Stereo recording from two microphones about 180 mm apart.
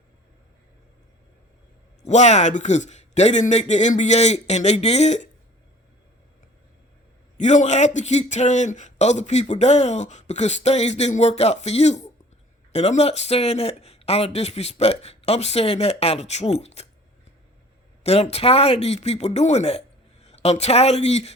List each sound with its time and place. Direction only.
2.0 s speech: 40° left (ahead or behind)
7.3 s speech: 45° left (ahead or behind)
18.0 s speech: 35° left (ahead or behind)